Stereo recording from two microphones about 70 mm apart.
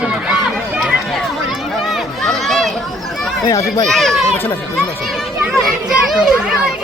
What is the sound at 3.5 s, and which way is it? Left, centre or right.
Speech, left.